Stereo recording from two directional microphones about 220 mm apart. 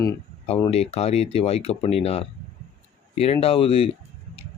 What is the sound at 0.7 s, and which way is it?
Speech, 25° left (ahead or behind).